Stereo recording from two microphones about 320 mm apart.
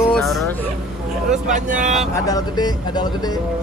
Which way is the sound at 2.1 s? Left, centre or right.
Centre.